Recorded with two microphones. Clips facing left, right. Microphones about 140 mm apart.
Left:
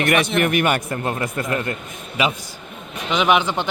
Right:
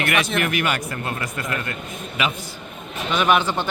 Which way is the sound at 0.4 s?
45° left (ahead or behind).